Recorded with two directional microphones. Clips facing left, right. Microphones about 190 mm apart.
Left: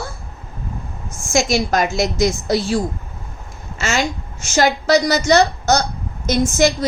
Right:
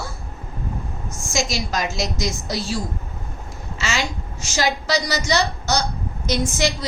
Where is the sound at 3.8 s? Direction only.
50° left (ahead or behind).